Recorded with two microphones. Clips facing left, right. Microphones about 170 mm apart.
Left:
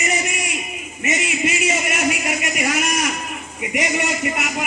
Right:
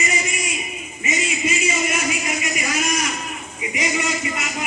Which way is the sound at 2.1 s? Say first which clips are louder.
Left 2 dB; 65° left (ahead or behind).